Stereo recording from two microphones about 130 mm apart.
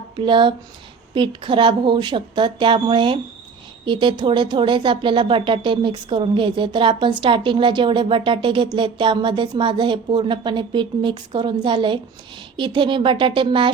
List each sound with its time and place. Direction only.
0.2 s speech: 40° right (ahead or behind)